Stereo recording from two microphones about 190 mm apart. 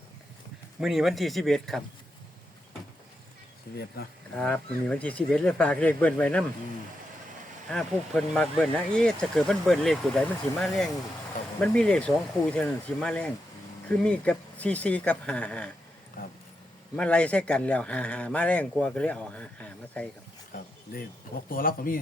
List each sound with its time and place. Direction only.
0.8 s speech: centre (ahead or behind)
4.4 s speech: 5° left (ahead or behind)
7.7 s speech: 5° left (ahead or behind)
17.0 s speech: 5° left (ahead or behind)
21.5 s speech: 50° left (ahead or behind)